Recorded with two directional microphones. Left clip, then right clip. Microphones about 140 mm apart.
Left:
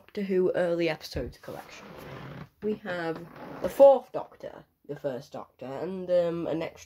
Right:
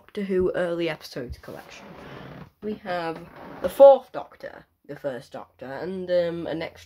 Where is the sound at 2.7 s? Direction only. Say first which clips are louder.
Right 3 dB; centre (ahead or behind).